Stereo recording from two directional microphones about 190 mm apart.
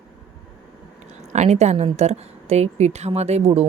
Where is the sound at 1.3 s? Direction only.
35° right (ahead or behind).